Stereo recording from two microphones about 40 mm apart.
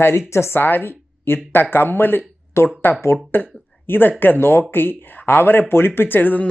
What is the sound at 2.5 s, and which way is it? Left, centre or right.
Speech, left.